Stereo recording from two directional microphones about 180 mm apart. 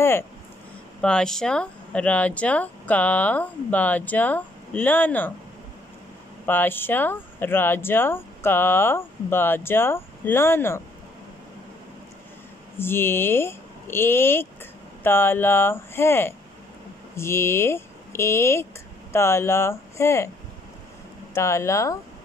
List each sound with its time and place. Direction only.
1.0 s speech: 5° left (ahead or behind)
6.4 s speech: 10° left (ahead or behind)
12.7 s speech: 10° left (ahead or behind)
21.4 s speech: 15° left (ahead or behind)